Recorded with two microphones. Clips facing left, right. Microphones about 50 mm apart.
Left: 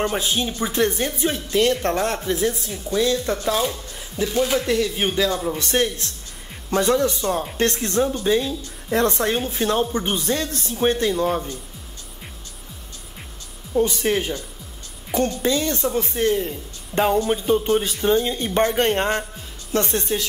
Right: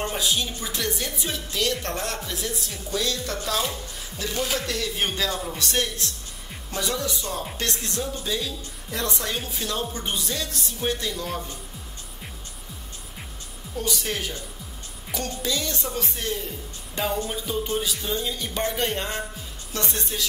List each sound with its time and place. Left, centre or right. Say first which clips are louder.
0.1 s a woman's voice: left 3 dB; left
5.6 s a woman's voice: left 5 dB; left
13.7 s a woman's voice: left 9 dB; left